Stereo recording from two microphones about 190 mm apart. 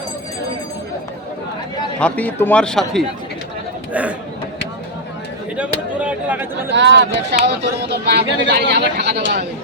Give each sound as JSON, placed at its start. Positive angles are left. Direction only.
{"t": 2.0, "sound": "a man's voice", "side_deg": 5}
{"t": 5.5, "sound": "a sound", "side_deg": -5}
{"t": 6.7, "sound": "speech", "side_deg": -70}